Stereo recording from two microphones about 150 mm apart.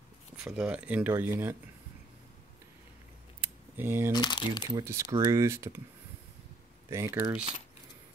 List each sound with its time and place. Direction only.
0.4 s speech: 5° right (ahead or behind)
3.3 s a sound: 15° right (ahead or behind)
4.1 s speech: 30° left (ahead or behind)
4.7 s speech: 25° right (ahead or behind)
6.9 s speech: 20° right (ahead or behind)